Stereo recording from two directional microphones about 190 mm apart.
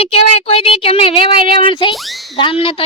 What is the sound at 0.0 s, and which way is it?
Speech, 30° left (ahead or behind).